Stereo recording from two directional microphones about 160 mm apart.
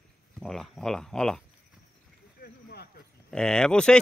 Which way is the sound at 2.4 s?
85° left.